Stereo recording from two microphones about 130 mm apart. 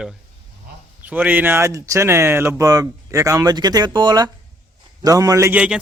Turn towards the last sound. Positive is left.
turn(degrees=-10)  # may be behind; listen again after turning